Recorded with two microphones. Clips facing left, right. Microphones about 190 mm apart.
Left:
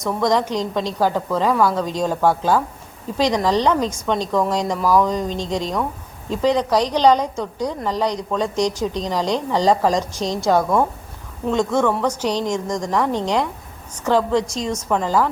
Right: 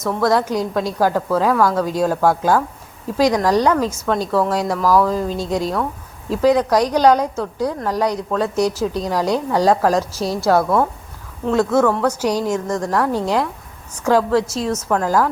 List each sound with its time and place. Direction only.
0.0 s a woman's voice: 5° right (ahead or behind)
4.8 s speech: 15° left (ahead or behind)
5.0 s a woman's voice: 5° right (ahead or behind)